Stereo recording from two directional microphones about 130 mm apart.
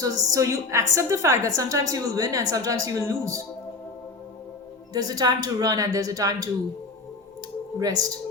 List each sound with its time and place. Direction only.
0.0 s a woman's voice: 25° right (ahead or behind)
4.9 s a woman's voice: 30° right (ahead or behind)
7.8 s a woman's voice: 30° right (ahead or behind)